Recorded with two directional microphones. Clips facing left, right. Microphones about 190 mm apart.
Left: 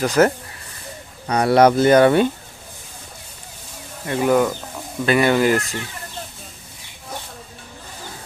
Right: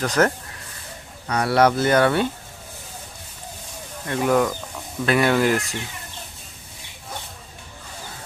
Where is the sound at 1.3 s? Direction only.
20° left (ahead or behind).